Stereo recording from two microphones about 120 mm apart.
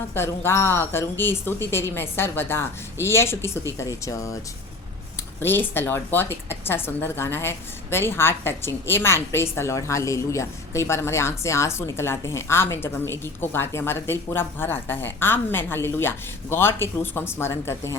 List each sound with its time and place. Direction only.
0.1 s speech: 20° left (ahead or behind)
5.4 s speech: 20° left (ahead or behind)